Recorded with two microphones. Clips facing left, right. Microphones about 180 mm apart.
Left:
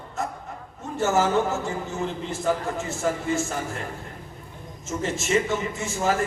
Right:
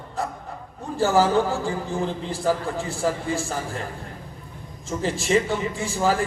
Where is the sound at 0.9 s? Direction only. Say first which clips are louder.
Right 2 dB; 30° right (ahead or behind).